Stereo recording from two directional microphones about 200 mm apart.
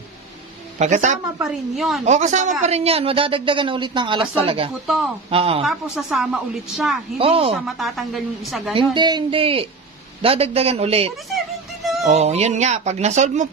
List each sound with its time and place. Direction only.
0.7 s speech: 35° right (ahead or behind)
1.4 s a woman's voice: centre (ahead or behind)
2.0 s speech: 35° right (ahead or behind)
4.8 s a woman's voice: centre (ahead or behind)
5.3 s speech: 30° right (ahead or behind)
5.6 s a woman's voice: centre (ahead or behind)
7.2 s speech: 30° right (ahead or behind)
7.5 s a woman's voice: centre (ahead or behind)
8.7 s speech: 25° right (ahead or behind)